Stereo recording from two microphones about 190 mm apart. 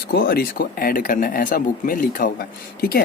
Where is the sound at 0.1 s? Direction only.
55° left (ahead or behind).